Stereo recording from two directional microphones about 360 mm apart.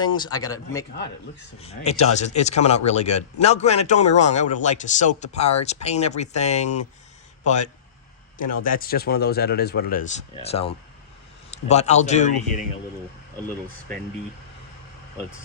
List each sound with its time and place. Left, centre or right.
0.0 s speech: centre